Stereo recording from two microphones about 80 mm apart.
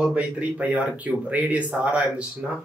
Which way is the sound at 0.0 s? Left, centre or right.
Centre.